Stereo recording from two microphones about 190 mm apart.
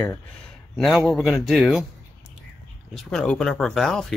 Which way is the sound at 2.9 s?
5° left (ahead or behind).